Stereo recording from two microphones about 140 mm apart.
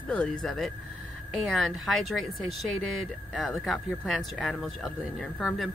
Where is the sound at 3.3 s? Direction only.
Centre (ahead or behind).